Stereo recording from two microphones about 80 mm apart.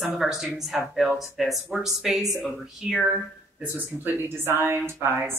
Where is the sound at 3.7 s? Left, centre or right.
Right.